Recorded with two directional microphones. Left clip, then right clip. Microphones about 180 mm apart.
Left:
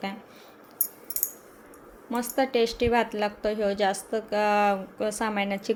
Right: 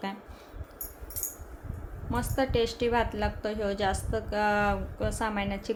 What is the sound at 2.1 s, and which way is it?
A woman's voice, 20° left (ahead or behind).